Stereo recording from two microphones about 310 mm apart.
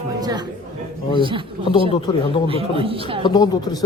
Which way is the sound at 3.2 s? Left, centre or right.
Centre.